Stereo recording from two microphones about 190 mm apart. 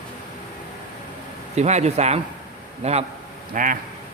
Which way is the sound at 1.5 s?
35° right (ahead or behind).